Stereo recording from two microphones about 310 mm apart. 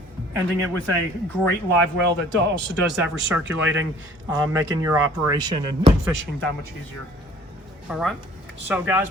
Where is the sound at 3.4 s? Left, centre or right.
Right.